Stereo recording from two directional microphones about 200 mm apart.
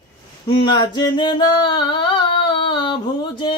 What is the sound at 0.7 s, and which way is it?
Singing, 20° left (ahead or behind).